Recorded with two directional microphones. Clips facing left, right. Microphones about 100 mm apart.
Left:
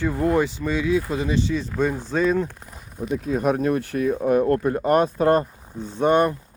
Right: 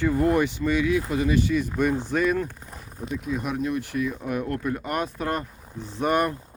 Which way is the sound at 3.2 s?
40° left (ahead or behind).